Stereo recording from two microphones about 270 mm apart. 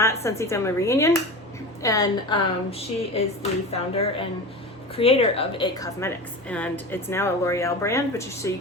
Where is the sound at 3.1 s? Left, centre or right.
Left.